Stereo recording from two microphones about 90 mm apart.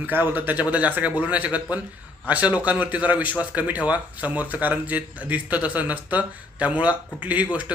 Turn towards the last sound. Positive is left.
turn(degrees=-15)  # may be behind; listen again after turning